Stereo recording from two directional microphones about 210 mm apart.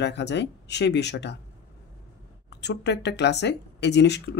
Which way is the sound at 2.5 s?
55° left (ahead or behind).